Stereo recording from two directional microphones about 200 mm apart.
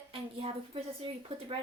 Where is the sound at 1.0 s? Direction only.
25° right (ahead or behind).